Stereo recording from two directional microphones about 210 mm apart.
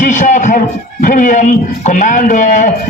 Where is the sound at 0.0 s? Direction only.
35° left (ahead or behind).